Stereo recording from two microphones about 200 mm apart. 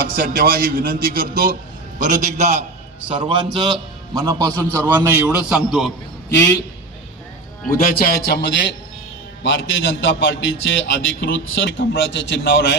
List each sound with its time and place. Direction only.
0.0 s a man's voice: 50° right (ahead or behind)
3.1 s a man's voice: 25° right (ahead or behind); by 5.9 s 5° right (ahead or behind)
6.3 s a man's voice: 10° left (ahead or behind)
7.7 s a man's voice: 45° left (ahead or behind)
9.4 s a man's voice: 65° left (ahead or behind)